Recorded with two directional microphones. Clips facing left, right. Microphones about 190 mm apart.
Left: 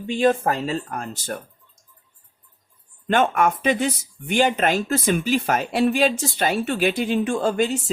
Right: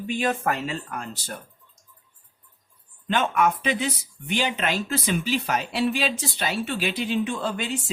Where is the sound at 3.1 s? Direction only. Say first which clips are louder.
Left 3 dB; 50° left (ahead or behind).